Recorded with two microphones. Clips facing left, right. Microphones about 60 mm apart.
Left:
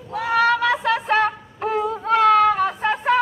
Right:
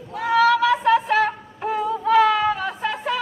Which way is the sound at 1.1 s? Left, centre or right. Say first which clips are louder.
Left 1 dB; left.